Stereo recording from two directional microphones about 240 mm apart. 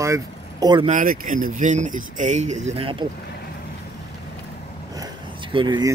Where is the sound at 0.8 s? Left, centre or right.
Right.